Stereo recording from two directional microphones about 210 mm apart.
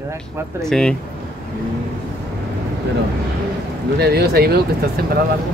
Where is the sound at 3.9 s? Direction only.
50° right (ahead or behind).